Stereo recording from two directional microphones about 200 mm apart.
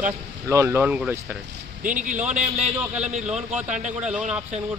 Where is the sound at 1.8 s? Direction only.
40° right (ahead or behind).